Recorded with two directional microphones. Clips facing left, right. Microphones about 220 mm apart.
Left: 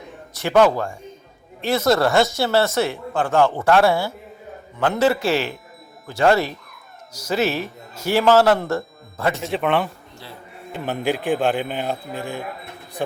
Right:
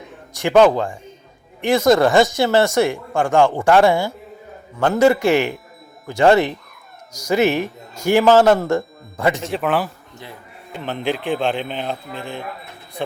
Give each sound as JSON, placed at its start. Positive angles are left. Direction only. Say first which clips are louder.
{"t": 0.3, "sound": "speech", "louder": "right 3 dB", "side_deg": -15}
{"t": 9.4, "sound": "a man's voice", "louder": "even", "side_deg": 0}